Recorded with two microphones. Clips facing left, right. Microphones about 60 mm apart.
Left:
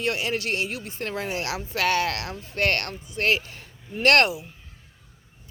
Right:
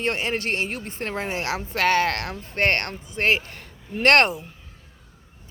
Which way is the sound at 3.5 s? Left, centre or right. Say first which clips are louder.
Right 3 dB; right.